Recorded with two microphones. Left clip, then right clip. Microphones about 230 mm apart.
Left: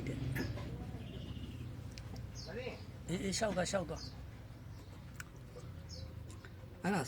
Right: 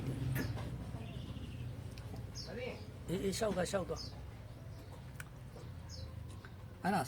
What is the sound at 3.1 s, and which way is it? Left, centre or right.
Speech, centre.